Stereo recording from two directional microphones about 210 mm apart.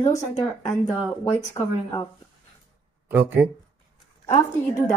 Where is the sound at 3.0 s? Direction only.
10° right (ahead or behind).